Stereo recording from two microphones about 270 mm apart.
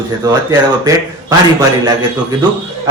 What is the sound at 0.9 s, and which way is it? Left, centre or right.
Speech, centre.